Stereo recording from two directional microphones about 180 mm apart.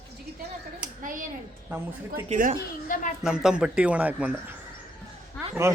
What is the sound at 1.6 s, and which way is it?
Speech, 15° right (ahead or behind).